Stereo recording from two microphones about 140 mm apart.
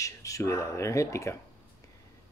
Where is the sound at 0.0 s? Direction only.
20° left (ahead or behind).